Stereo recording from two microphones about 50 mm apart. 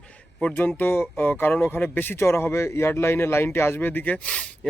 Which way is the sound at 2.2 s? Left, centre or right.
Left.